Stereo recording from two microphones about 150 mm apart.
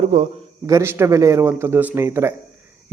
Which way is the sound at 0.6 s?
20° right (ahead or behind).